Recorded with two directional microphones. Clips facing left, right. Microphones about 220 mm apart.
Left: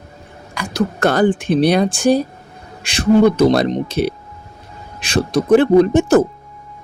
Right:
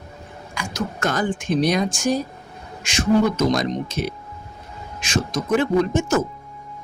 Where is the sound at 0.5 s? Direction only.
35° left (ahead or behind).